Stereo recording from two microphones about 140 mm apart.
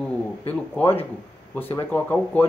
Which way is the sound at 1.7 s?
10° left (ahead or behind).